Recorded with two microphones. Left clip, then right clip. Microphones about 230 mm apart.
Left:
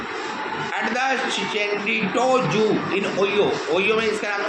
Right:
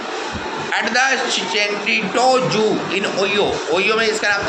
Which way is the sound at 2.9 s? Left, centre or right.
Right.